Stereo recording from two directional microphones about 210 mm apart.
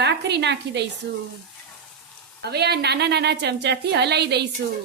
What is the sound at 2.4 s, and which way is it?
A woman's voice, 50° right (ahead or behind).